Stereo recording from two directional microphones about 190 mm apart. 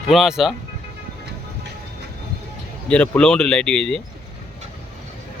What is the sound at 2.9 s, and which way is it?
Speech, 5° left (ahead or behind).